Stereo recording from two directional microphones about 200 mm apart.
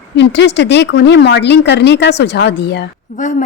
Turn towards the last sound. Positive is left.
turn(degrees=40)  # may be behind; listen again after turning